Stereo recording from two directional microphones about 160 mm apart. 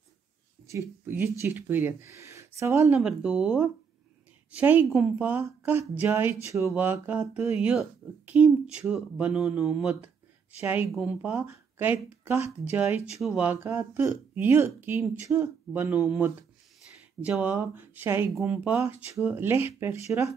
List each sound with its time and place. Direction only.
0.7 s speech: 15° right (ahead or behind)
2.9 s speech: 5° right (ahead or behind)
12.4 s speech: 40° left (ahead or behind)
12.7 s speech: 15° right (ahead or behind)
17.2 s speech: 10° right (ahead or behind)